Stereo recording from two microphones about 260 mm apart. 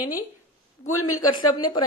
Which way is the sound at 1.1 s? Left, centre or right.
Centre.